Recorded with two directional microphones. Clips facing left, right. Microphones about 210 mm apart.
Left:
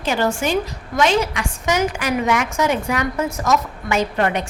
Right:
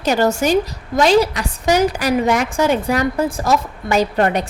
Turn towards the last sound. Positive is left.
turn(degrees=-35)  # may be behind; listen again after turning